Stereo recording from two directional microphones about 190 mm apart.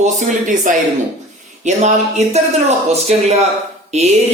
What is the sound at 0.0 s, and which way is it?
Speech, 40° right (ahead or behind).